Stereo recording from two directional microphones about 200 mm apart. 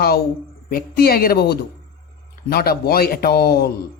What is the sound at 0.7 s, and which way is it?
A man's voice, 45° left (ahead or behind).